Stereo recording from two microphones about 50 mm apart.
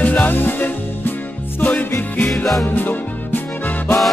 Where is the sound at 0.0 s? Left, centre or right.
Left.